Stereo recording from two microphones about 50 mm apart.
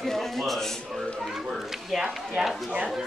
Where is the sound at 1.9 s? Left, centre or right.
Centre.